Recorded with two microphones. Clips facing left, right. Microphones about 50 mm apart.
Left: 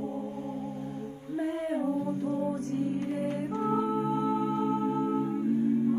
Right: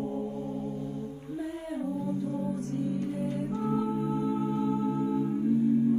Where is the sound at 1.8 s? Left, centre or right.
Left.